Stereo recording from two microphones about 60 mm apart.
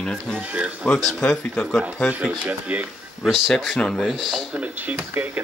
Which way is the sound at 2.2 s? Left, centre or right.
Right.